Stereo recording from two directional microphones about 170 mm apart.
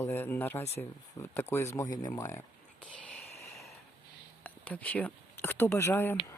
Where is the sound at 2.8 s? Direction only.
5° left (ahead or behind).